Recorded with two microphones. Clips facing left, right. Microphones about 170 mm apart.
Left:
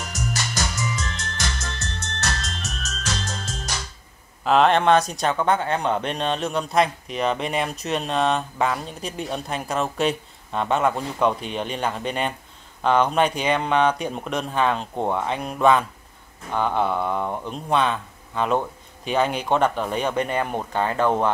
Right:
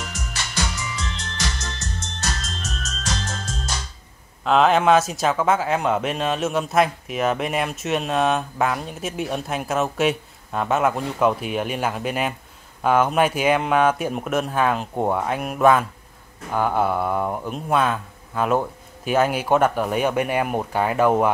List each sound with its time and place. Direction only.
0.0 s music: 40° left (ahead or behind)
2.0 s music: 65° left (ahead or behind)
4.5 s speech: centre (ahead or behind)